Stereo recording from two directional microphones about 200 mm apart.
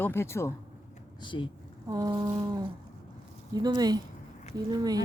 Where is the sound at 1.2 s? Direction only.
25° left (ahead or behind).